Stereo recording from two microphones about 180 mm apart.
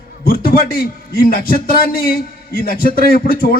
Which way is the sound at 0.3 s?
55° left (ahead or behind).